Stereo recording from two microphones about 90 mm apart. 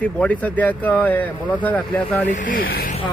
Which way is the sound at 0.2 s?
15° left (ahead or behind).